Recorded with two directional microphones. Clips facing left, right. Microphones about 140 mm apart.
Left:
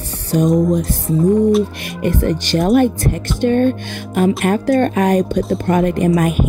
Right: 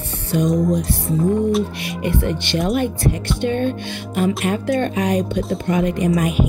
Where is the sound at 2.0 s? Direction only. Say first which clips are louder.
Left 4 dB; 40° left (ahead or behind).